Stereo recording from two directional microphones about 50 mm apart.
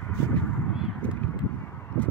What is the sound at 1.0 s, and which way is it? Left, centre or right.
Honk, left.